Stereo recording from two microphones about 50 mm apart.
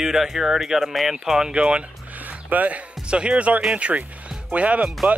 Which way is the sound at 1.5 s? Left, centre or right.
Right.